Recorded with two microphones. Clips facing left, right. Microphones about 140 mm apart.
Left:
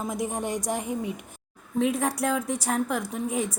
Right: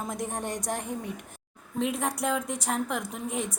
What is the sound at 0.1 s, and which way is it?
A woman's voice, 10° left (ahead or behind).